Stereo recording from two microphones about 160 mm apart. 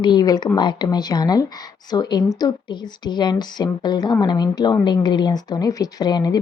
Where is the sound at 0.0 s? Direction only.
30° left (ahead or behind).